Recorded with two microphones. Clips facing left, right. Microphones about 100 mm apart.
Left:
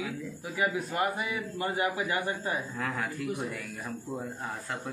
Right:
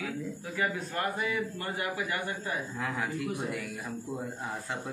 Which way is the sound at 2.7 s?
15° right (ahead or behind).